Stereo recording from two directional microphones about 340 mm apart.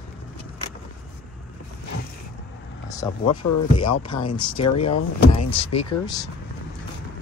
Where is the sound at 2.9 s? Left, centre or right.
Centre.